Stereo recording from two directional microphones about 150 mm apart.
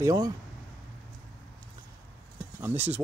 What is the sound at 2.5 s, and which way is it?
Speech, 15° right (ahead or behind).